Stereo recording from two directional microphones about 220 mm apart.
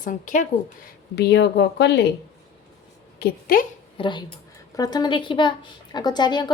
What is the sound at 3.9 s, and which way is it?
A woman's voice, 20° left (ahead or behind).